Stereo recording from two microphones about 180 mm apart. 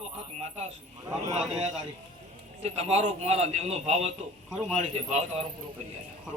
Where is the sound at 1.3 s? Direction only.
40° right (ahead or behind).